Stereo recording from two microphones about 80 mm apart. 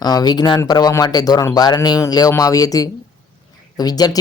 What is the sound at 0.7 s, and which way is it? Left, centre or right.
Speech, left.